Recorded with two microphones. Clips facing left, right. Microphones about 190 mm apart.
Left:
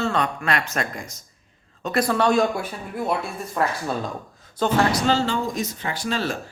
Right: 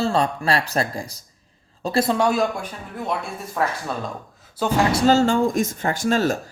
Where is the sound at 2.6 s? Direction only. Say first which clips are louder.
Left 3 dB; 10° left (ahead or behind); by 4.8 s 10° right (ahead or behind).